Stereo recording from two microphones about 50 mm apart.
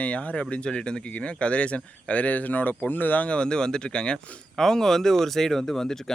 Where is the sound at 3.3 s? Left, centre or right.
Centre.